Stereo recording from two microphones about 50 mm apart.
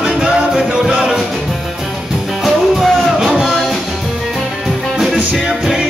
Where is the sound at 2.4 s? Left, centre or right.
Centre.